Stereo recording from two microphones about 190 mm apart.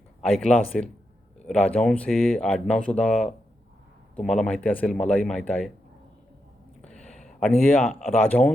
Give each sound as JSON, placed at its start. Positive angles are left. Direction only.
{"t": 0.2, "sound": "speech", "side_deg": 5}
{"t": 6.8, "sound": "speech", "side_deg": 5}